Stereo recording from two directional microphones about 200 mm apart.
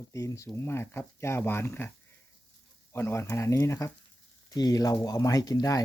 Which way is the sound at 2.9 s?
15° left (ahead or behind).